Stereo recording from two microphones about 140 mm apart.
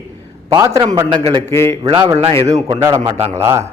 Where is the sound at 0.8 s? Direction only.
30° right (ahead or behind).